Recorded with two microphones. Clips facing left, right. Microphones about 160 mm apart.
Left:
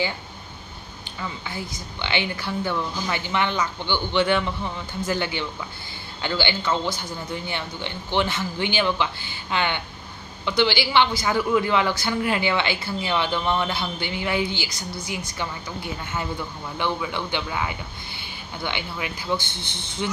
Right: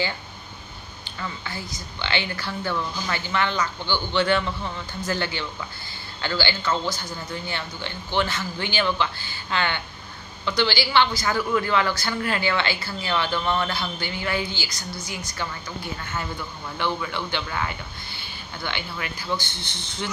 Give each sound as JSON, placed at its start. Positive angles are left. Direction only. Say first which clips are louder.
{"t": 1.2, "sound": "a woman's voice", "louder": "left 1 dB", "side_deg": 15}
{"t": 19.6, "sound": "speech", "louder": "left 1 dB", "side_deg": 55}